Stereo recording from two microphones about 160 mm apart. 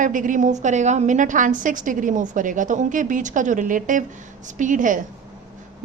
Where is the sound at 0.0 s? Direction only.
55° right (ahead or behind).